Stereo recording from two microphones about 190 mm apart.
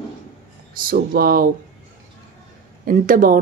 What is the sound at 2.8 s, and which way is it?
Speech, 45° right (ahead or behind).